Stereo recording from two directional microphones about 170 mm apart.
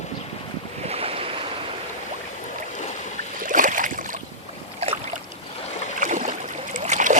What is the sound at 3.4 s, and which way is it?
Boat, 50° right (ahead or behind).